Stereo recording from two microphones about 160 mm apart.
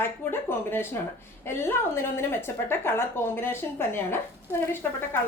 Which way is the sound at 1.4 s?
15° left (ahead or behind).